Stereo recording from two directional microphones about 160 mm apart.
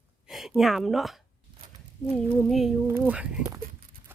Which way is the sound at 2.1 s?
5° left (ahead or behind).